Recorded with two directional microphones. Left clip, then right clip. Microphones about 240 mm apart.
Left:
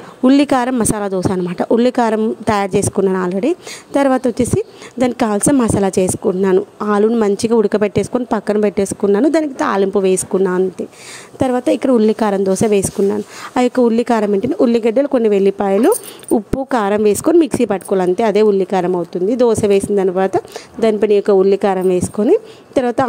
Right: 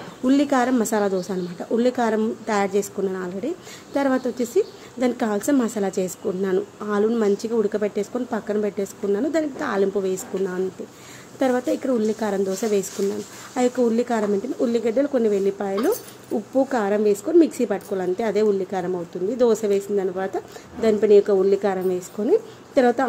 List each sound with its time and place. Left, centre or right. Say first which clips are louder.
0.2 s a woman's voice: left 7 dB; left